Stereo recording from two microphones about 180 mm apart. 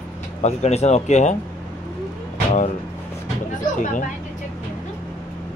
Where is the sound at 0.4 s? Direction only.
40° left (ahead or behind).